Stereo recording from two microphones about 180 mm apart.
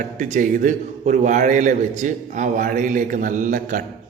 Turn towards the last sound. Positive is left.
turn(degrees=-45)  # may be behind; listen again after turning